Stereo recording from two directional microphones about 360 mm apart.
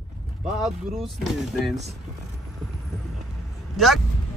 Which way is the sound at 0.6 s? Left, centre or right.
Centre.